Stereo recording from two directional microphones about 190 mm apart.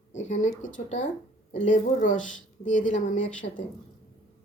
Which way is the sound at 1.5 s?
40° left (ahead or behind).